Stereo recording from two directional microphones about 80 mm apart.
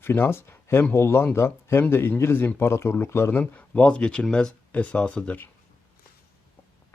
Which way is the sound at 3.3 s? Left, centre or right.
Centre.